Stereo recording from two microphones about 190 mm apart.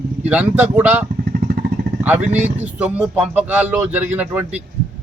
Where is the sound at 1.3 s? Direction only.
55° right (ahead or behind).